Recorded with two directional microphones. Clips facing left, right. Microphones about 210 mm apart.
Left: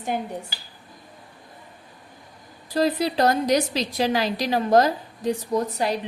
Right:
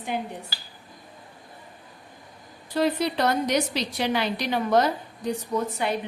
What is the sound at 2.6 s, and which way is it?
A woman's voice, 35° left (ahead or behind).